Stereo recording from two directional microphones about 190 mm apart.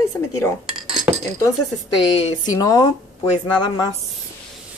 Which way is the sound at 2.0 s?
20° left (ahead or behind).